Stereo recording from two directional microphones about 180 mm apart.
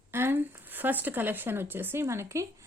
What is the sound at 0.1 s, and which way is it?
Speech, 10° right (ahead or behind).